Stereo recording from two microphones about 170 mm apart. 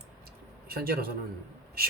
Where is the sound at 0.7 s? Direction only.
65° right (ahead or behind).